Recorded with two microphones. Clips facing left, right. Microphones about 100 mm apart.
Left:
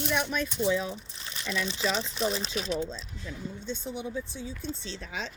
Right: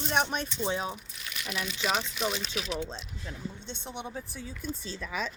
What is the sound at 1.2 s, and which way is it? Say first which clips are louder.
Speech: left 3 dB; 30° left (ahead or behind).